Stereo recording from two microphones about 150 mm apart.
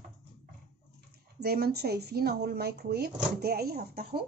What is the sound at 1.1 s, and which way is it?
Speech, 90° right.